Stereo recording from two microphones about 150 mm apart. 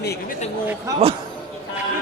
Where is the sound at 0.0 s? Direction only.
90° left.